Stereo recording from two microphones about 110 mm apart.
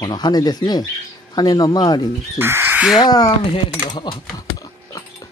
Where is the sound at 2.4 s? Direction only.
20° right (ahead or behind).